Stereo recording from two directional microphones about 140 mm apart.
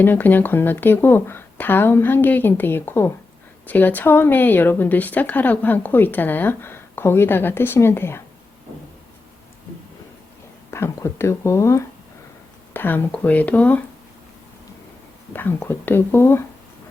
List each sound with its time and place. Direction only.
0.0 s a woman's voice: 15° left (ahead or behind)
10.7 s a woman's voice: 20° left (ahead or behind)
15.3 s a woman's voice: 15° left (ahead or behind)